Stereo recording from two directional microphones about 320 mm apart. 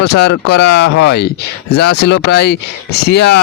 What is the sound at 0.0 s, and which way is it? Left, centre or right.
Speech, left.